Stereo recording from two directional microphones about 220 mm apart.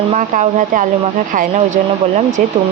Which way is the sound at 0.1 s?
35° right (ahead or behind).